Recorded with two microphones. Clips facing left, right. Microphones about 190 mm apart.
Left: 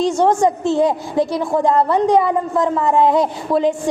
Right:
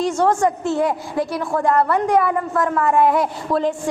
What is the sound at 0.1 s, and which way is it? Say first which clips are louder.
A woman's voice: left 3 dB; 15° left (ahead or behind).